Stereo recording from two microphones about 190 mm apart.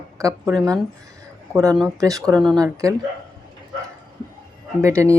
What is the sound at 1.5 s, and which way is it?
Speech, 15° right (ahead or behind).